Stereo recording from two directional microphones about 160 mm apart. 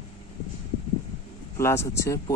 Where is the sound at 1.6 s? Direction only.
15° left (ahead or behind).